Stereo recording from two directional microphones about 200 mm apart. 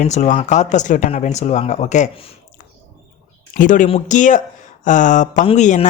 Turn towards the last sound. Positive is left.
turn(degrees=35)  # may be behind; listen again after turning